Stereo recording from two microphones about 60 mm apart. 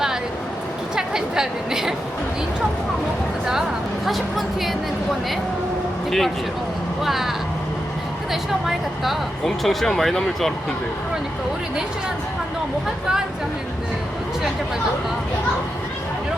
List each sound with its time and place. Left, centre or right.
0.9 s a sound: centre
3.4 s a woman's voice: centre
6.1 s a woman's voice: centre